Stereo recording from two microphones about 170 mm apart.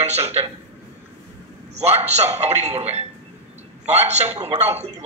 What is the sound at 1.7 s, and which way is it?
A man's voice, 40° right (ahead or behind).